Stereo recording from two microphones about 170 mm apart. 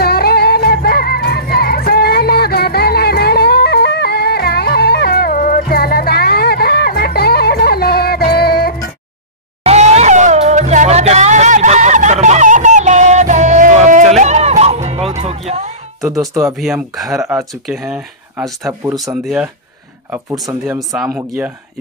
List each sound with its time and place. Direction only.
0.0 s music: 65° left (ahead or behind)
9.6 s music: 40° right (ahead or behind)
16.5 s speech: centre (ahead or behind)
20.9 s speech: centre (ahead or behind)